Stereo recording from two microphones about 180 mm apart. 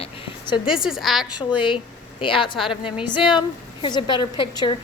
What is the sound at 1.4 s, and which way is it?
A woman's voice, 25° left (ahead or behind).